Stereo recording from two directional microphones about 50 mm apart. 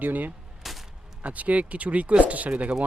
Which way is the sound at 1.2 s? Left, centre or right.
Right.